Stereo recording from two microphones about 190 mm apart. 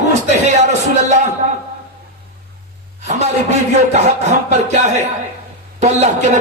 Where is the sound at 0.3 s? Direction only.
35° right (ahead or behind).